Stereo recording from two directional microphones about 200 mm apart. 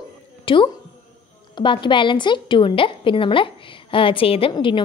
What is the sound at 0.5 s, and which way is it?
A woman's voice, 25° left (ahead or behind).